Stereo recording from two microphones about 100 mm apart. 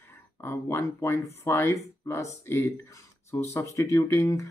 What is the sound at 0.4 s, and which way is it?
Speech, 25° left (ahead or behind).